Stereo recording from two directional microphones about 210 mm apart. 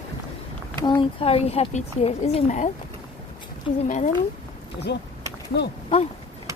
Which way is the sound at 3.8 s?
40° left (ahead or behind).